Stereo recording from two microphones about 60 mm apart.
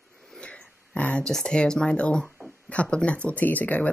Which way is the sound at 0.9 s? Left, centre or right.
Left.